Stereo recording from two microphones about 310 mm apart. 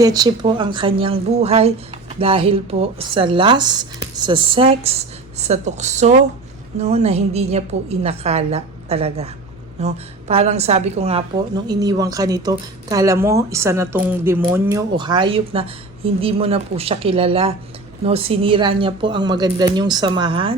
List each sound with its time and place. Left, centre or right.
0.0 s a woman's voice: centre